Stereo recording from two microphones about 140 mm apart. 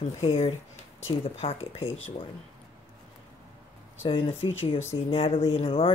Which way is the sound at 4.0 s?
40° left (ahead or behind).